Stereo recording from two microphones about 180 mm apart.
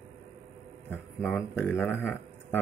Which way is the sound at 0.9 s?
10° left (ahead or behind).